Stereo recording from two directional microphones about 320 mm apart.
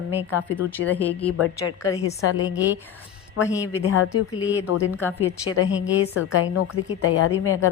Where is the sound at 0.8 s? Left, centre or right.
Centre.